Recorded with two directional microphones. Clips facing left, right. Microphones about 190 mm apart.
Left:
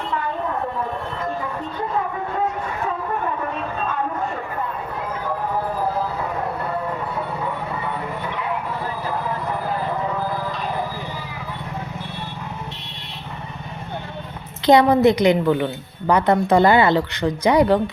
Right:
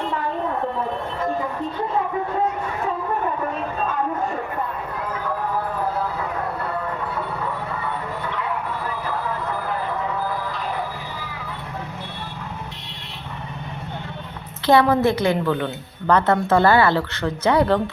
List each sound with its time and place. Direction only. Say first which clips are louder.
14.7 s a woman's voice: left 3 dB; 20° left (ahead or behind)